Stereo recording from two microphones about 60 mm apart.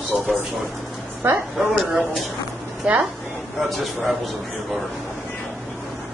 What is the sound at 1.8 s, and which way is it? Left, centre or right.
Speech, centre.